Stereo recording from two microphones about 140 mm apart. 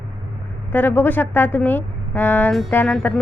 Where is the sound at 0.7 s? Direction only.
15° left (ahead or behind).